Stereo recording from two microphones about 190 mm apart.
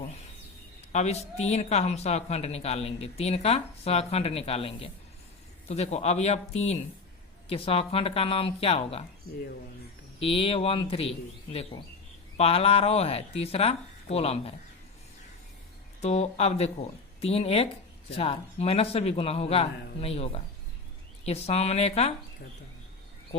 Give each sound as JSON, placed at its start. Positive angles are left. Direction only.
{"t": 0.9, "sound": "speech", "side_deg": 35}
{"t": 10.2, "sound": "speech", "side_deg": 30}
{"t": 12.4, "sound": "speech", "side_deg": 30}
{"t": 16.0, "sound": "speech", "side_deg": 35}